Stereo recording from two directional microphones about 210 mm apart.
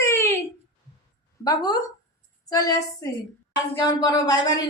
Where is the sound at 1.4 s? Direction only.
20° left (ahead or behind).